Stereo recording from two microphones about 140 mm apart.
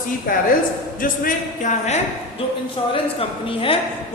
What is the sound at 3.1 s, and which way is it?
Speech, 40° left (ahead or behind).